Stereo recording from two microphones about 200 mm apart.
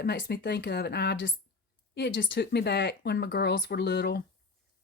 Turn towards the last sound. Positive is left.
turn(degrees=55)  # may be behind; listen again after turning